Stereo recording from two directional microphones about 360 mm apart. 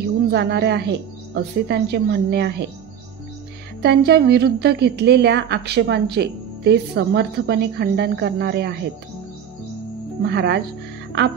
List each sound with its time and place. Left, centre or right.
0.3 s a woman's voice: right
3.8 s a woman's voice: right
10.2 s a woman's voice: right